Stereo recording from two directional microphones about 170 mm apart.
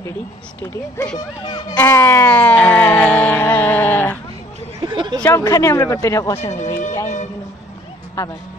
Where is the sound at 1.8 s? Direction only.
15° left (ahead or behind).